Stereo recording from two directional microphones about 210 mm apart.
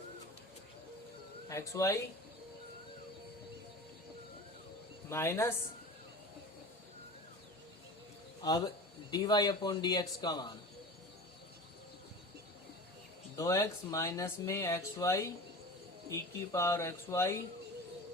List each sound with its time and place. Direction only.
1.5 s speech: 15° left (ahead or behind)
5.0 s speech: 10° left (ahead or behind)
8.4 s a man's voice: 20° left (ahead or behind)
13.3 s speech: 15° left (ahead or behind)